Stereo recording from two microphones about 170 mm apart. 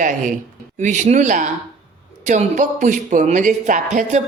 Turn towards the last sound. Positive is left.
turn(degrees=-45)  # may be behind; listen again after turning